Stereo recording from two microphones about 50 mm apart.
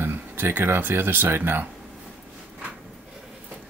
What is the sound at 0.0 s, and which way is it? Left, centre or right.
Speech, right.